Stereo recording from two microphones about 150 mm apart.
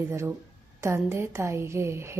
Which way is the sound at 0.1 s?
15° right (ahead or behind).